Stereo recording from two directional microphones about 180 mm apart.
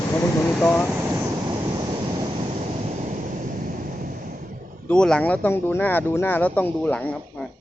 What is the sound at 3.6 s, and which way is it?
Waves, 50° right (ahead or behind).